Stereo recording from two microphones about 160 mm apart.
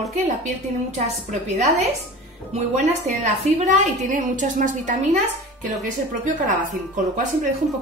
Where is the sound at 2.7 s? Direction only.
45° right (ahead or behind).